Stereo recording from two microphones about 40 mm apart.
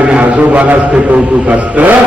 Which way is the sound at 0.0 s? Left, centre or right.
Right.